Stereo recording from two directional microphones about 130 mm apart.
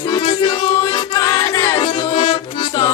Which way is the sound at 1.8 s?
40° left (ahead or behind).